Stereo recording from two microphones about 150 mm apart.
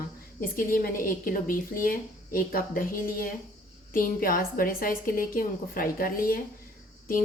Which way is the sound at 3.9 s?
70° left (ahead or behind).